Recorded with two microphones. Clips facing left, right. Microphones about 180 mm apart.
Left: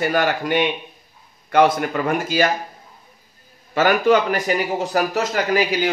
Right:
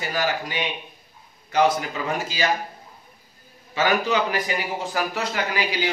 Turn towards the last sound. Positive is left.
turn(degrees=45)  # may be behind; listen again after turning